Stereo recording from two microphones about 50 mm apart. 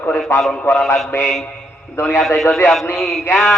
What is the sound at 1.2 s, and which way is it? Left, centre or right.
Speech, centre.